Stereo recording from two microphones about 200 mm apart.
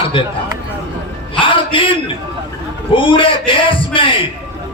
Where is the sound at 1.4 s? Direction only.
25° left (ahead or behind).